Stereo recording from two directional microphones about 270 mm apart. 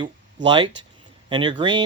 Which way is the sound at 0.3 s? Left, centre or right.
Centre.